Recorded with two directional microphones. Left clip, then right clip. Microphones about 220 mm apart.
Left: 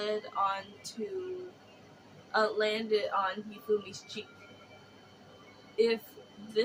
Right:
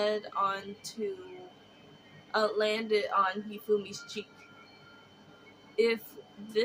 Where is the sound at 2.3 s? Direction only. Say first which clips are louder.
Even; 25° right (ahead or behind).